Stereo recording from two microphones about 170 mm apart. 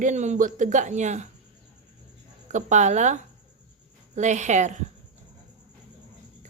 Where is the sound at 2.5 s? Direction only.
45° right (ahead or behind).